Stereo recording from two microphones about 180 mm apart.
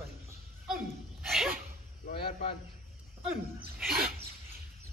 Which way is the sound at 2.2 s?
30° left (ahead or behind).